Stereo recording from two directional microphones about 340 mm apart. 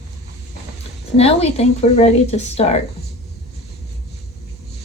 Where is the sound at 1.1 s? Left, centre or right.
Centre.